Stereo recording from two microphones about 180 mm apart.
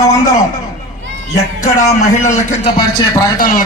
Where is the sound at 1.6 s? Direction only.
40° left (ahead or behind).